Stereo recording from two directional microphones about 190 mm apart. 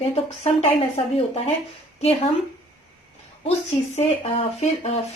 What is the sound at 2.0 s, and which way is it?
Speech, 30° left (ahead or behind).